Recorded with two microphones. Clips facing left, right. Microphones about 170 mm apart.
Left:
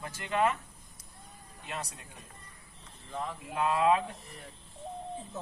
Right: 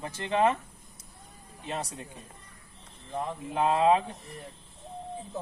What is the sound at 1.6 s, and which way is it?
Speech, 25° right (ahead or behind).